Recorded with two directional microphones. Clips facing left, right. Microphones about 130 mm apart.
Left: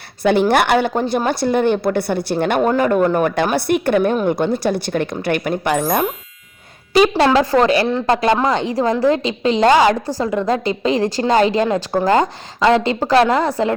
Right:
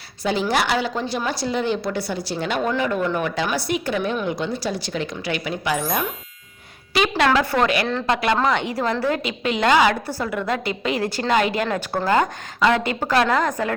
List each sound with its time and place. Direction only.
0.2 s a woman's voice: 60° left (ahead or behind)
6.9 s a woman's voice: 35° left (ahead or behind)
11.6 s speech: 20° left (ahead or behind)
12.0 s speech: 30° left (ahead or behind)